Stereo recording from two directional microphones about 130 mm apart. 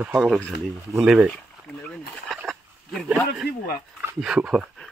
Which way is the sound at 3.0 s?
5° right (ahead or behind).